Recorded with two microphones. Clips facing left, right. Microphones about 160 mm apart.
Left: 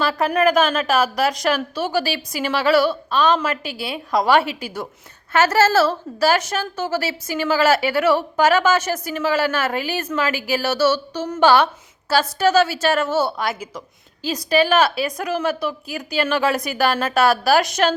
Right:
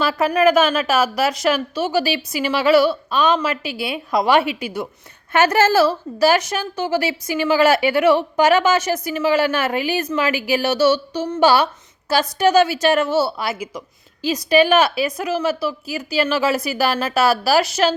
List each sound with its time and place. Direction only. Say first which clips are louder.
0.0 s a woman's voice: right 2 dB; 10° right (ahead or behind)
3.5 s a woman's voice: right 2 dB; 45° left (ahead or behind)
3.9 s a woman's voice: even; 10° right (ahead or behind)